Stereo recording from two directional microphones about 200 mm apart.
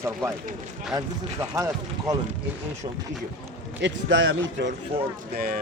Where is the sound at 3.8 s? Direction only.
60° right (ahead or behind).